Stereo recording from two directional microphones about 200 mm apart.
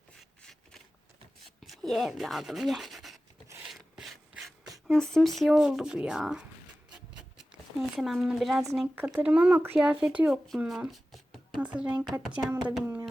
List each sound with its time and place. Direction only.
0.2 s a sound: 5° left (ahead or behind)
1.5 s speech: centre (ahead or behind)
3.7 s ratchet: centre (ahead or behind)
4.9 s speech: 5° left (ahead or behind)
7.1 s writing: 5° right (ahead or behind)
8.7 s speech: 5° right (ahead or behind)